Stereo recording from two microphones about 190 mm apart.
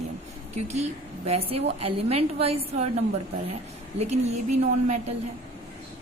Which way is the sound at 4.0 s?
35° right (ahead or behind).